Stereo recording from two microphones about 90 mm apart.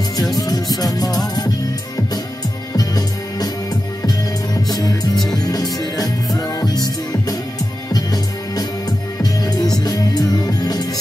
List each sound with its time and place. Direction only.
0.4 s music: 45° left (ahead or behind)
2.7 s music: 45° left (ahead or behind)
4.6 s music: 45° left (ahead or behind)
7.9 s music: 45° left (ahead or behind)